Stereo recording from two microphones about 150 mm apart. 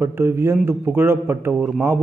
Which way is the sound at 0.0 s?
15° right (ahead or behind).